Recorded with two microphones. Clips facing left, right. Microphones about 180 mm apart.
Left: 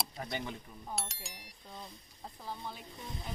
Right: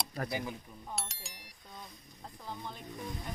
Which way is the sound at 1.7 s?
30° left (ahead or behind).